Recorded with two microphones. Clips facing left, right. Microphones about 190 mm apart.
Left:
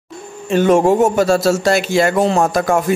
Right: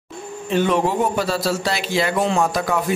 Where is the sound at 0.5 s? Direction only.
45° left (ahead or behind).